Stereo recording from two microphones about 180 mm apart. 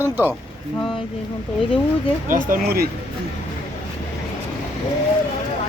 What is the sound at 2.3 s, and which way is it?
Speech, 50° right (ahead or behind).